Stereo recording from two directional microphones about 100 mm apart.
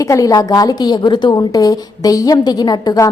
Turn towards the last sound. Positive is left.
turn(degrees=40)  # may be behind; listen again after turning